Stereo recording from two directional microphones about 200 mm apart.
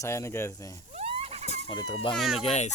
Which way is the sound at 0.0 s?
15° left (ahead or behind).